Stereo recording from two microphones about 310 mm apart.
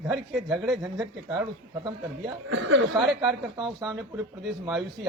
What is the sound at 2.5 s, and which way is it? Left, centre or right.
Speech, right.